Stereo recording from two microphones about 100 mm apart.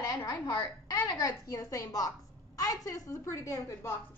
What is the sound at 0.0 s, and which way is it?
A woman's voice, 35° left (ahead or behind).